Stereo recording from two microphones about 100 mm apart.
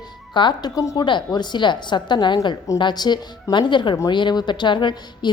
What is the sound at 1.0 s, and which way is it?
A woman's voice, 50° left (ahead or behind).